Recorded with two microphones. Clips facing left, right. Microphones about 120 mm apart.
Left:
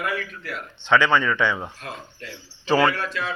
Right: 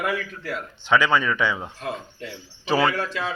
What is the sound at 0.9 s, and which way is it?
Speech, 15° right (ahead or behind).